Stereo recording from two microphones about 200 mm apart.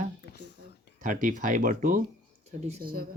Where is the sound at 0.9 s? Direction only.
40° right (ahead or behind).